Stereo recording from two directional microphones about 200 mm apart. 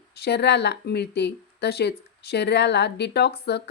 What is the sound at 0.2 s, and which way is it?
Speech, 55° left (ahead or behind).